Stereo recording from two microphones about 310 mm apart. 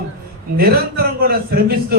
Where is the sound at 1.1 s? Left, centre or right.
Right.